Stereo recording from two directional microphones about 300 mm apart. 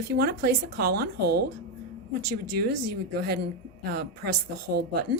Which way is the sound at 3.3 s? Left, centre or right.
Right.